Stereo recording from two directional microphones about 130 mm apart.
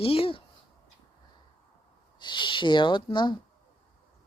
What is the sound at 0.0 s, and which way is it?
Speech, 45° left (ahead or behind).